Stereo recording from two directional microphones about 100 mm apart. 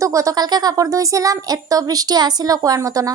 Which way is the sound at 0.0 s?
30° right (ahead or behind).